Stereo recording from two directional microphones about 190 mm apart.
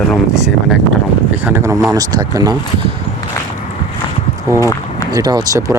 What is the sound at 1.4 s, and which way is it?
Speech, 10° right (ahead or behind).